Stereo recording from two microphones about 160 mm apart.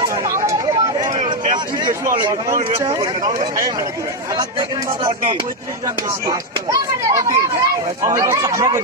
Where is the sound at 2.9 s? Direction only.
30° right (ahead or behind).